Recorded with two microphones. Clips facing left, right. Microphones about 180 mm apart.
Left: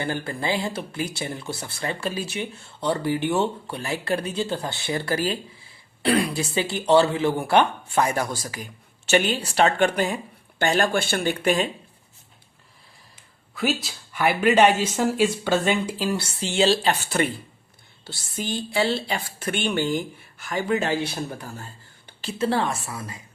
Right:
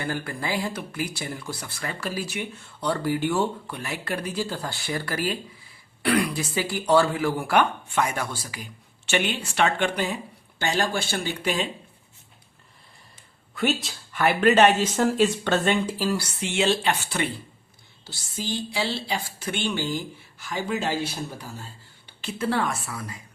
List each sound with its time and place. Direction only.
0.0 s speech: 25° left (ahead or behind); by 11.7 s 50° left (ahead or behind)
13.6 s speech: centre (ahead or behind)
14.2 s speech: 10° left (ahead or behind); by 17.3 s 45° left (ahead or behind)
18.0 s speech: 60° left (ahead or behind)
22.2 s speech: 30° left (ahead or behind)